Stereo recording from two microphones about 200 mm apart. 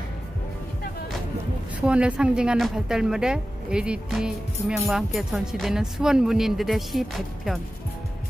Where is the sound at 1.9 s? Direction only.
5° right (ahead or behind).